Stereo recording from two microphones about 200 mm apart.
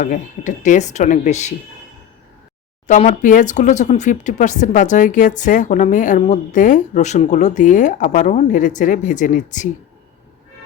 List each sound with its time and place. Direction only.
0.0 s speech: 40° left (ahead or behind)
2.8 s speech: 40° left (ahead or behind)